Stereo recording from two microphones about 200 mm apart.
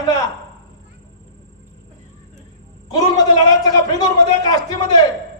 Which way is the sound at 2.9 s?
20° left (ahead or behind).